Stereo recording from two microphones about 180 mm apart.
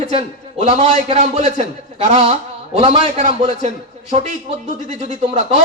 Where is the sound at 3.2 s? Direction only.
40° right (ahead or behind).